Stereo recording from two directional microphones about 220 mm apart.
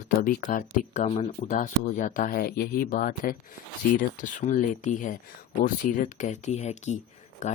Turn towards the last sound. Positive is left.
turn(degrees=30)  # may be behind; listen again after turning